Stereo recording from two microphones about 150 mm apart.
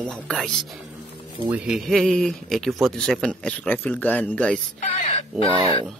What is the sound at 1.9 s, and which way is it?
Speech, centre (ahead or behind).